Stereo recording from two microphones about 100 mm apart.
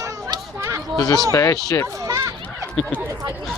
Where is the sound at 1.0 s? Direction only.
40° left (ahead or behind).